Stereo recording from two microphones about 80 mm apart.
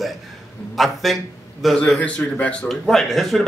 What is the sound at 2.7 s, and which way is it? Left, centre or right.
Speech, centre.